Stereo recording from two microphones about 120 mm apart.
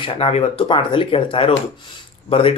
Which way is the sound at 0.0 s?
55° left (ahead or behind).